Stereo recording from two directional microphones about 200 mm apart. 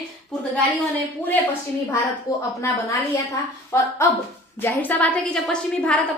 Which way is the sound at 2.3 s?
15° left (ahead or behind).